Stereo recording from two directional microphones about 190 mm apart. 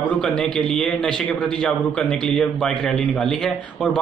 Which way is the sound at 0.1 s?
5° left (ahead or behind).